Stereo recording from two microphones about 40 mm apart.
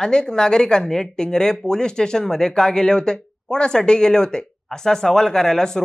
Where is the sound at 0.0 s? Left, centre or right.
Centre.